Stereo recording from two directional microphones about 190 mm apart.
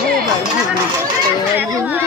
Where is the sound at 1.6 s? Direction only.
10° right (ahead or behind).